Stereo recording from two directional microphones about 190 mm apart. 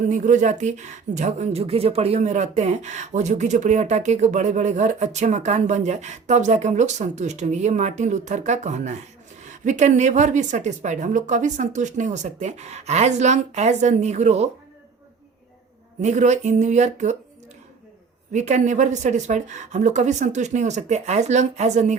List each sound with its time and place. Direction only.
0.1 s speech: 40° right (ahead or behind)
16.0 s speech: 40° right (ahead or behind)
18.3 s speech: 40° right (ahead or behind)